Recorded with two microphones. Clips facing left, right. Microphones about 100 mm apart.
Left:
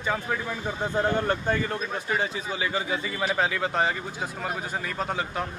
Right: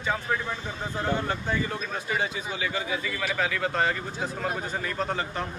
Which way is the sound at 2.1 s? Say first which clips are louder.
Left 1 dB; 30° left (ahead or behind).